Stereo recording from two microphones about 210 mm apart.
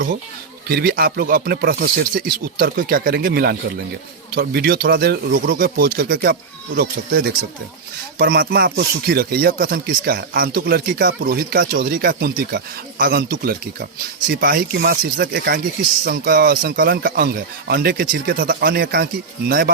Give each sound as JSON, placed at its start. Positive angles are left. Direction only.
{"t": 0.7, "sound": "speech", "side_deg": -45}